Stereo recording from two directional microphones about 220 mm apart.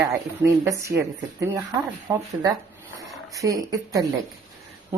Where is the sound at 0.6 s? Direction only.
15° right (ahead or behind).